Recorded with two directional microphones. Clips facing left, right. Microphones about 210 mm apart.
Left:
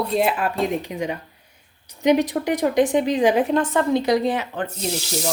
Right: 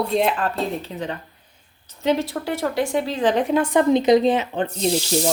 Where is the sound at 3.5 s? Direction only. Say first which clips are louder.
Right 2 dB; 20° right (ahead or behind).